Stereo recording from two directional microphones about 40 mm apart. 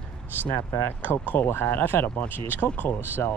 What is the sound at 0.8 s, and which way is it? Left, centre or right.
Speech, left.